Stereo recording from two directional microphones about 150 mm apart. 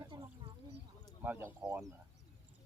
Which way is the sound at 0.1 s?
30° right (ahead or behind).